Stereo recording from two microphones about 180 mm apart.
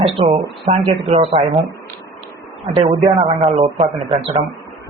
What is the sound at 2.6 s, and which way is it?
A man's voice, 30° right (ahead or behind).